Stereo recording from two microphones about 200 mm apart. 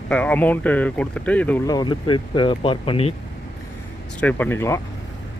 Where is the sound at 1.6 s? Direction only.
20° left (ahead or behind).